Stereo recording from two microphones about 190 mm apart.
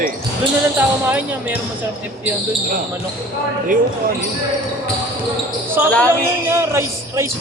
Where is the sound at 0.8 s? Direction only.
10° right (ahead or behind).